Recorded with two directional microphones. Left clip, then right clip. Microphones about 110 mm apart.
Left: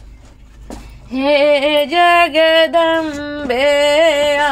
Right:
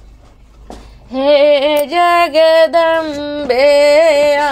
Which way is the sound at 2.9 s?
40° right (ahead or behind).